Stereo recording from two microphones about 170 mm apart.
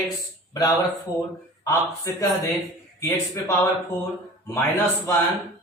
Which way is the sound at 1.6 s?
20° left (ahead or behind).